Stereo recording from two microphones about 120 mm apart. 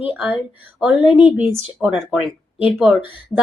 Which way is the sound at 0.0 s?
15° right (ahead or behind).